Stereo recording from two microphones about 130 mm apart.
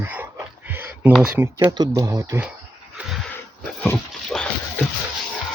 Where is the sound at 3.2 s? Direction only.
15° left (ahead or behind).